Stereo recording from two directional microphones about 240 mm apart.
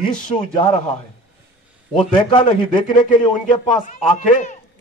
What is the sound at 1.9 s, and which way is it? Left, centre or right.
A man's voice, left.